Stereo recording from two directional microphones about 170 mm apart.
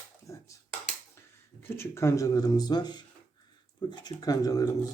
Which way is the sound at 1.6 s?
15° left (ahead or behind).